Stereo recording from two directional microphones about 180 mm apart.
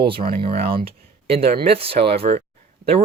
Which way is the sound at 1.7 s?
30° right (ahead or behind).